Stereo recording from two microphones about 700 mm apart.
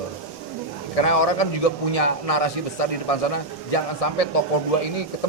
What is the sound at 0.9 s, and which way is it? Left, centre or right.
A man's voice, left.